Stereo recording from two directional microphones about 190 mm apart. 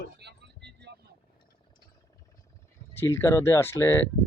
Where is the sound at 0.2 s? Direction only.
60° right (ahead or behind).